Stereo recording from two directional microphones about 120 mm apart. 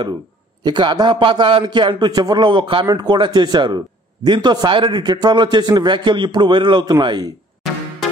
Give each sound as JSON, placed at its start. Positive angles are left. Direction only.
{"t": 0.7, "sound": "speech", "side_deg": -35}